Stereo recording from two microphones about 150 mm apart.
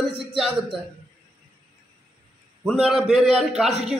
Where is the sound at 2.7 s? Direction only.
Centre (ahead or behind).